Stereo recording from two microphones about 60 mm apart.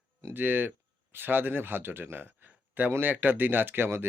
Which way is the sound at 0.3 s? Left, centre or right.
Right.